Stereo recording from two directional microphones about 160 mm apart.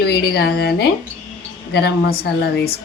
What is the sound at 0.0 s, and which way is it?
A woman's voice, 90° left.